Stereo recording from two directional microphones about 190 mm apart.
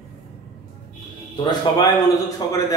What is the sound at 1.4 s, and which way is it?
A man's voice, 25° left (ahead or behind).